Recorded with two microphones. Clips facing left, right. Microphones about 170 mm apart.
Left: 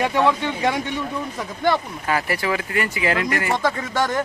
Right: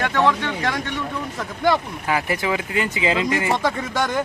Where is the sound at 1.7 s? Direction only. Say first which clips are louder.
Right 1 dB; 10° right (ahead or behind).